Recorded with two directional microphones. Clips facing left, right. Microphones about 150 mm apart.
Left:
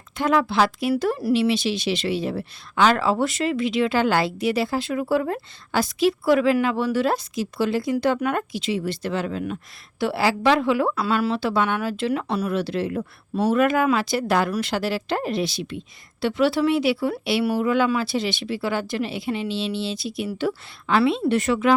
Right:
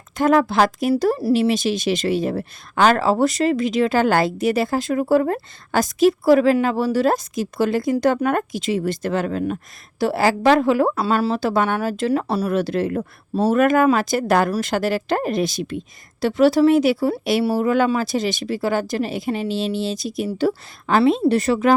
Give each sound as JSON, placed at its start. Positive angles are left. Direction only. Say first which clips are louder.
{"t": 0.2, "sound": "speech", "louder": "right 4 dB", "side_deg": -45}
{"t": 12.5, "sound": "speech", "louder": "right 4 dB", "side_deg": -45}